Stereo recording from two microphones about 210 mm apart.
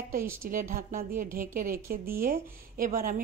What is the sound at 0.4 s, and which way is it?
A woman's voice, 40° right (ahead or behind).